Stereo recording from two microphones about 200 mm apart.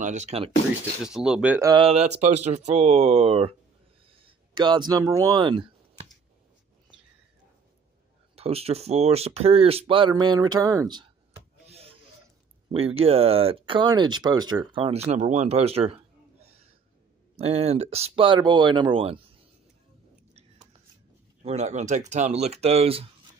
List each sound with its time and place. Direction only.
0.0 s speech: 35° right (ahead or behind)
1.0 s speech: 5° right (ahead or behind)
1.7 s speech: 30° right (ahead or behind)
4.6 s speech: 20° right (ahead or behind)
8.4 s speech: 30° right (ahead or behind)
11.6 s wood: 30° right (ahead or behind)
12.7 s speech: 30° right (ahead or behind)
15.0 s a man's voice: 35° right (ahead or behind)
21.4 s speech: 35° right (ahead or behind)